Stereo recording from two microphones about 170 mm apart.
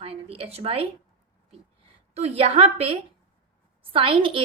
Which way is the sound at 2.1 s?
35° right (ahead or behind).